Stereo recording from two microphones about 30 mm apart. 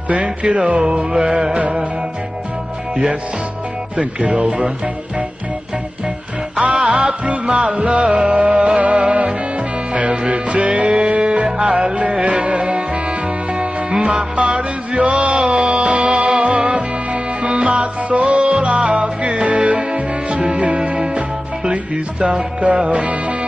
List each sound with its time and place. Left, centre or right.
0.1 s speech: right
3.9 s speech: right
6.6 s music: right
11.4 s music: right
11.7 s music: right
14.0 s music: right